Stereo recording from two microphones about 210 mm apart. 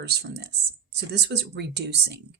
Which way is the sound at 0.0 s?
50° right (ahead or behind).